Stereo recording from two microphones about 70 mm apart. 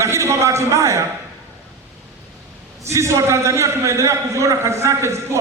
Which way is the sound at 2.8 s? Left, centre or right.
Right.